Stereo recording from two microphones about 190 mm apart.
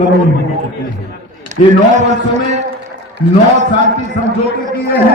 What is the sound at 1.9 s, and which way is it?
Music, 40° right (ahead or behind).